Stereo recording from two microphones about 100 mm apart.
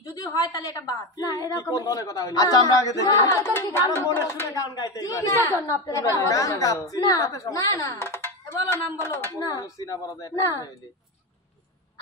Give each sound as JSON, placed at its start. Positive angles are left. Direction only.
{"t": 0.1, "sound": "a woman's voice", "side_deg": 35}
{"t": 3.3, "sound": "a woman's voice", "side_deg": 25}